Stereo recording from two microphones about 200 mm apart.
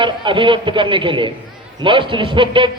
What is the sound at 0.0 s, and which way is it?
A man's voice, 25° right (ahead or behind).